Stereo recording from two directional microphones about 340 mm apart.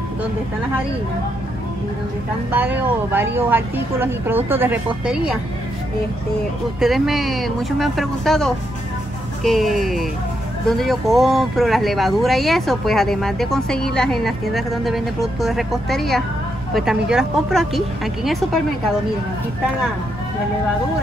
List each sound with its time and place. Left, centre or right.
2.5 s speech: centre
6.8 s speech: centre